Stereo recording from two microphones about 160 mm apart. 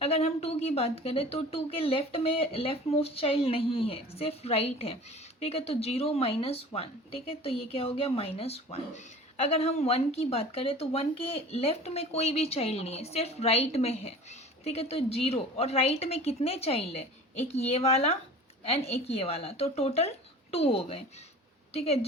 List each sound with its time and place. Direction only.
0.0 s speech: 40° left (ahead or behind)